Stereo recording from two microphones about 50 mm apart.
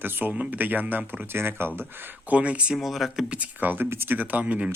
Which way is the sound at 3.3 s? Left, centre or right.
Right.